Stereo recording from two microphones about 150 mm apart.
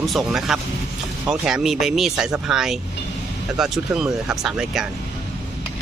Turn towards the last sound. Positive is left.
turn(degrees=-5)  # may be behind; listen again after turning